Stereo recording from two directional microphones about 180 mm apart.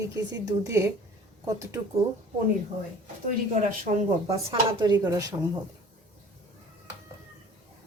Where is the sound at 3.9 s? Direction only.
35° right (ahead or behind).